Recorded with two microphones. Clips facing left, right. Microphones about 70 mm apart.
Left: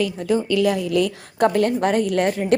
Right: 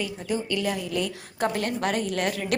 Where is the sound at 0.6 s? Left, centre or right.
Left.